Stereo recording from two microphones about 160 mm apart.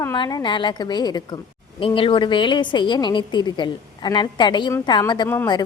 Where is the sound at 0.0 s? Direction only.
25° left (ahead or behind).